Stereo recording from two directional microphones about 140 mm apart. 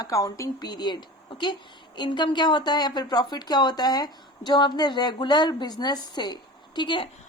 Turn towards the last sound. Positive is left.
turn(degrees=35)  # may be behind; listen again after turning